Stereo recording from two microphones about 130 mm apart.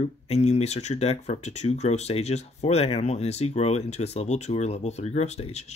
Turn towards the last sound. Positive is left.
turn(degrees=55)  # may be behind; listen again after turning